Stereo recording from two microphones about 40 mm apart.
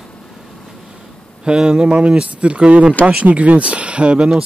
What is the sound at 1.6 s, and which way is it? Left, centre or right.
A man's voice, centre.